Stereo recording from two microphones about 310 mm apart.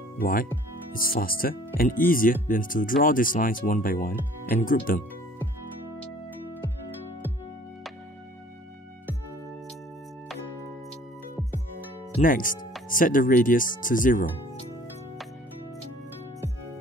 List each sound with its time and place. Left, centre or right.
0.2 s speech: left
12.2 s speech: left